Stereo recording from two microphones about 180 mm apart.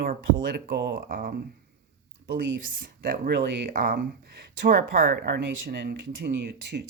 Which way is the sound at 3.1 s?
55° right (ahead or behind).